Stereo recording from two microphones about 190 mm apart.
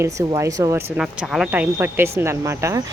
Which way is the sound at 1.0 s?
5° right (ahead or behind).